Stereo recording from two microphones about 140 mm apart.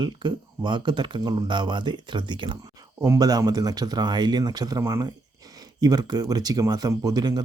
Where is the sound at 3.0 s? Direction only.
25° right (ahead or behind).